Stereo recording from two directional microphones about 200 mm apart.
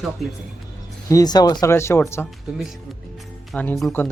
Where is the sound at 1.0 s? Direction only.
20° left (ahead or behind).